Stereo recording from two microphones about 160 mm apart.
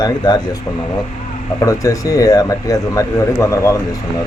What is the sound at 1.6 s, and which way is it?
Speech, 20° left (ahead or behind).